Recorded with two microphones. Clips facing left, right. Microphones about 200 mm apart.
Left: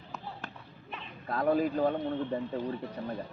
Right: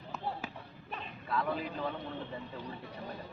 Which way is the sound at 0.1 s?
Centre (ahead or behind).